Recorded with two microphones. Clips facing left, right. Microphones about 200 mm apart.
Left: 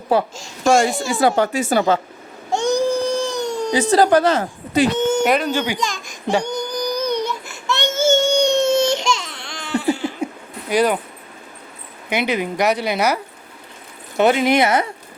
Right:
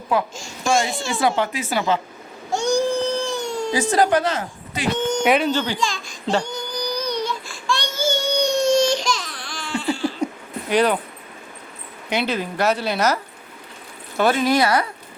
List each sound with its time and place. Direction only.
0.1 s a woman's voice: 35° left (ahead or behind)
2.5 s crying: 20° left (ahead or behind)
4.0 s a woman's voice: 35° left (ahead or behind)
5.2 s speech: centre (ahead or behind)
5.5 s a woman's voice: 15° left (ahead or behind)
6.2 s a sound: 20° left (ahead or behind)
7.4 s baby cry: 20° left (ahead or behind)
10.7 s a woman's voice: 10° left (ahead or behind)
12.0 s a woman's voice: 15° left (ahead or behind)
14.2 s speech: 20° left (ahead or behind)